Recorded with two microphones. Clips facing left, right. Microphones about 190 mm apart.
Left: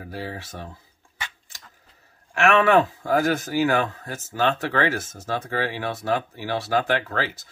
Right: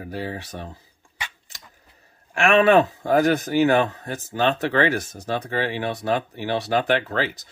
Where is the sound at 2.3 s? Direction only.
15° right (ahead or behind).